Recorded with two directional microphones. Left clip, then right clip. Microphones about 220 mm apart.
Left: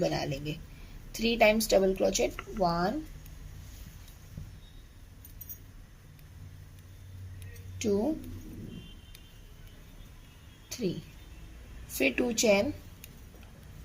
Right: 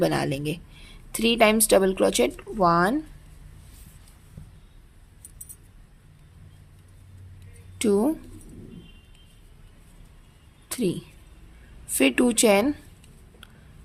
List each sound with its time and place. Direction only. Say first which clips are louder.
0.0 s a woman's voice: right 7 dB; 30° right (ahead or behind)
7.8 s speech: right 7 dB; 35° right (ahead or behind)
10.7 s a sound: right 7 dB; 30° right (ahead or behind)
11.9 s a woman's voice: right 7 dB; 35° right (ahead or behind)